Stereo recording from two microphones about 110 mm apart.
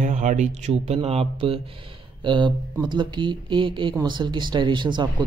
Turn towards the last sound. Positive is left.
turn(degrees=-45)  # may be behind; listen again after turning